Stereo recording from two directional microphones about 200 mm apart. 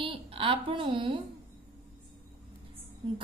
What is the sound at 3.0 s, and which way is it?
Music, 25° right (ahead or behind).